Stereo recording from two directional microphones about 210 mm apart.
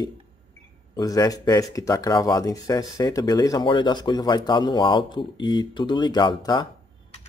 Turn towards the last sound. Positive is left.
turn(degrees=20)  # may be behind; listen again after turning